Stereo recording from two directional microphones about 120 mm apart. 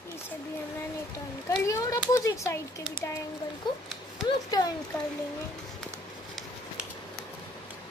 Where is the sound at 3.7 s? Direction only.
40° left (ahead or behind).